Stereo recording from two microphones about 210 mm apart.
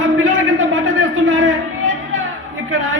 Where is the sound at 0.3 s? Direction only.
70° right (ahead or behind).